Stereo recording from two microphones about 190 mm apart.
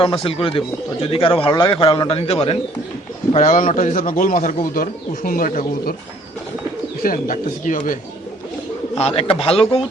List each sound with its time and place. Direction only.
0.0 s a man's voice: 30° left (ahead or behind)
3.3 s a man's voice: 40° left (ahead or behind)
7.0 s a man's voice: 45° left (ahead or behind)
9.0 s speech: 30° left (ahead or behind)